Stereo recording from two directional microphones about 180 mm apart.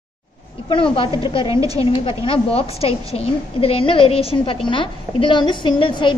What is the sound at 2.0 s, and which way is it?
A woman's voice, 30° left (ahead or behind).